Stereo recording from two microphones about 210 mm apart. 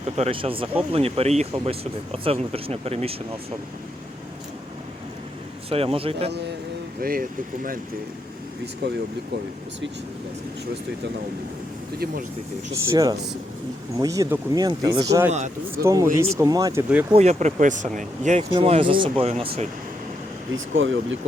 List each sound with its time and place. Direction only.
0.0 s speech: 30° right (ahead or behind)
5.6 s speech: 25° right (ahead or behind)
7.0 s speech: 45° right (ahead or behind)
8.8 s speech: 55° right (ahead or behind)
12.7 s speech: 15° right (ahead or behind)
15.3 s speech: 35° right (ahead or behind)
15.7 s speech: 15° right (ahead or behind)
17.2 s speech: 35° right (ahead or behind)
20.7 s speech: 65° right (ahead or behind)